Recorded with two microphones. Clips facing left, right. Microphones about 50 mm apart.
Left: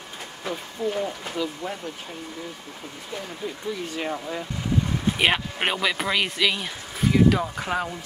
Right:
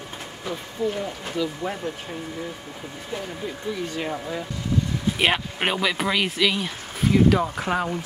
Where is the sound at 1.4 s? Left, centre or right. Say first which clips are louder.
Right 2 dB; centre.